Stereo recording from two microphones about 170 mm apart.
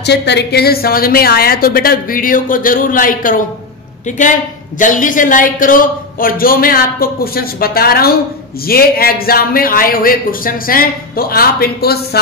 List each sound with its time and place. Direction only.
0.0 s speech: 85° left; by 12.2 s 65° left (ahead or behind)